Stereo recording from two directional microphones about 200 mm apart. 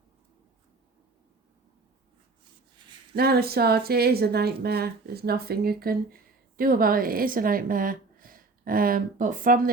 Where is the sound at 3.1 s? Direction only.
50° right (ahead or behind).